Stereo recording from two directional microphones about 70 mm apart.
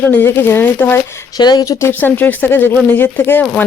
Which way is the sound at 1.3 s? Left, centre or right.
Left.